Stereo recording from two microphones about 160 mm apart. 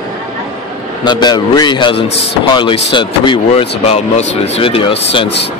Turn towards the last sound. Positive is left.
turn(degrees=35)  # may be behind; listen again after turning